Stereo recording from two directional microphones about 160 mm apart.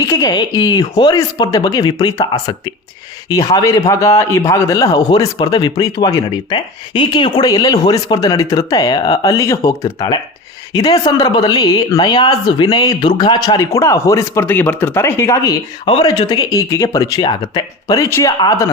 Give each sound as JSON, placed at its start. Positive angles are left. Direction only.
{"t": 0.0, "sound": "speech", "side_deg": 20}